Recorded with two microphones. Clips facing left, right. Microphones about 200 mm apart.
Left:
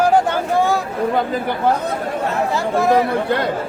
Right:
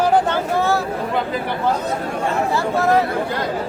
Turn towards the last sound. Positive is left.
turn(degrees=15)  # may be behind; listen again after turning